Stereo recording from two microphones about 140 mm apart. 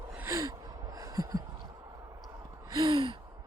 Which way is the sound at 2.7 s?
30° right (ahead or behind).